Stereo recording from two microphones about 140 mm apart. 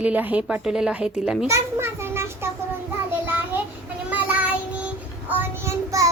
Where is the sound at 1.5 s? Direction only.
20° right (ahead or behind).